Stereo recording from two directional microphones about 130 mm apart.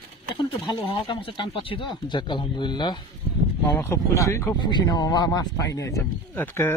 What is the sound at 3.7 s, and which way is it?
Speech, 20° left (ahead or behind).